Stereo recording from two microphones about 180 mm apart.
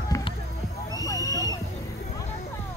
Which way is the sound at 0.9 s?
20° left (ahead or behind).